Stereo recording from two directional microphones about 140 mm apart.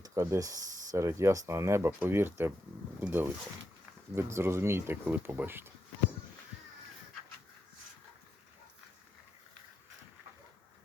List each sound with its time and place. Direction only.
0.0 s speech: 20° right (ahead or behind)